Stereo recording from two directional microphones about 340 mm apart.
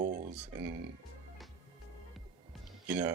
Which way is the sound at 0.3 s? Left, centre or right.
Centre.